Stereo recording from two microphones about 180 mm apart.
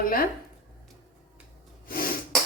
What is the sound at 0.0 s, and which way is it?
Speech, 55° left (ahead or behind).